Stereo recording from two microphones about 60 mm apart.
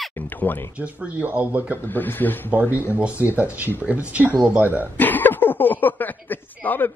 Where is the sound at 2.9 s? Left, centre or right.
Right.